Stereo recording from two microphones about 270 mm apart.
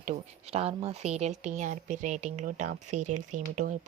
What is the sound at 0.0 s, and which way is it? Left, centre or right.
A woman's voice, right.